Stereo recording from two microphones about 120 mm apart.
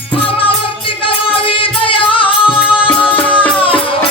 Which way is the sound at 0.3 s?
50° left (ahead or behind).